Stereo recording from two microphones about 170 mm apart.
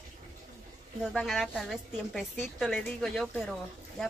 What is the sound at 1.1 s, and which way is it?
A woman's voice, centre (ahead or behind).